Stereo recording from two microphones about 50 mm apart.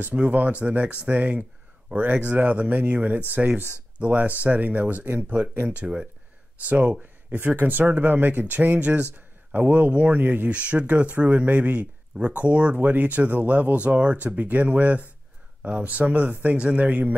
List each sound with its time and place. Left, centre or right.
0.0 s speech: right
3.4 s speech: centre
4.0 s speech: right
5.8 s speech: right